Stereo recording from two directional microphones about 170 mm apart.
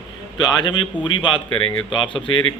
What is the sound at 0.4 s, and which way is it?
Speech, 25° left (ahead or behind).